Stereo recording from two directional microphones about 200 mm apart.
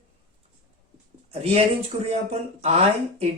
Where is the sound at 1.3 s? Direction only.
30° right (ahead or behind).